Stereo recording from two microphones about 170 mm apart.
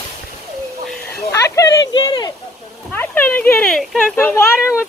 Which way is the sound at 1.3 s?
20° left (ahead or behind).